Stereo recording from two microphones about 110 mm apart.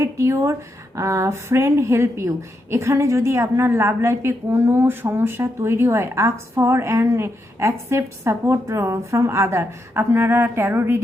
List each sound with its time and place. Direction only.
0.0 s a woman's voice: 25° right (ahead or behind)